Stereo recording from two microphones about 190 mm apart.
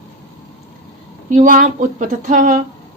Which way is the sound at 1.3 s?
45° right (ahead or behind).